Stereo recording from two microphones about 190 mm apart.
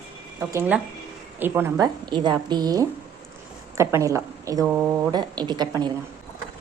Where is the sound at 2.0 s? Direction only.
25° right (ahead or behind).